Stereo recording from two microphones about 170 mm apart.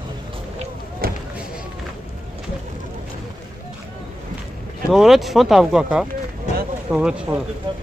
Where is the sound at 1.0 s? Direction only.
60° right (ahead or behind).